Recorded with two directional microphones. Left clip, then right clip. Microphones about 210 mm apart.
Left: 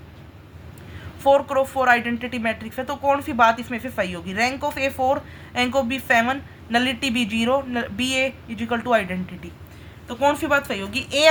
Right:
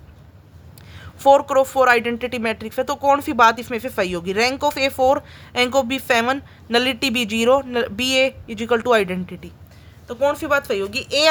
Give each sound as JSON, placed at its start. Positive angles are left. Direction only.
{"t": 1.2, "sound": "speech", "side_deg": -50}